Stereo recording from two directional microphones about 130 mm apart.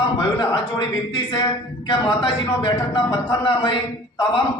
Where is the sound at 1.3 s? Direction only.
40° left (ahead or behind).